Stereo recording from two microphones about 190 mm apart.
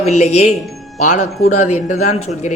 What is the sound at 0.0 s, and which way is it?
A man's voice, 35° left (ahead or behind).